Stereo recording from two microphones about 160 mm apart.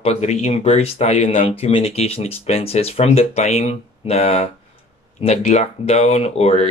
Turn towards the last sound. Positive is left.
turn(degrees=40)  # may be behind; listen again after turning